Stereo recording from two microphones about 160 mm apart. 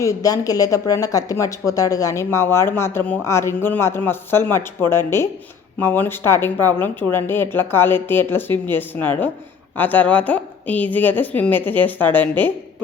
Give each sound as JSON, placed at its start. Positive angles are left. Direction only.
{"t": 0.0, "sound": "speech", "side_deg": 20}